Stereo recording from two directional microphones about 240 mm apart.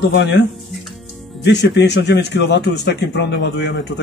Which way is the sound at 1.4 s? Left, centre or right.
Left.